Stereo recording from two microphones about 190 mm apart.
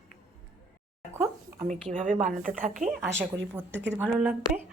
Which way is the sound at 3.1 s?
10° right (ahead or behind).